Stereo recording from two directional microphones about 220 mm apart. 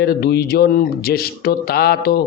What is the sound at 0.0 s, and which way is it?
Speech, 45° left (ahead or behind).